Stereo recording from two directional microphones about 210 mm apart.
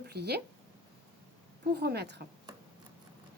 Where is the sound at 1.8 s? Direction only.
50° right (ahead or behind).